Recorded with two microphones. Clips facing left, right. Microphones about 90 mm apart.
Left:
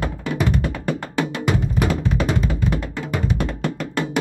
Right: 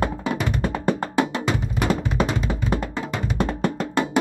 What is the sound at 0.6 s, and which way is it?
Music, 30° right (ahead or behind).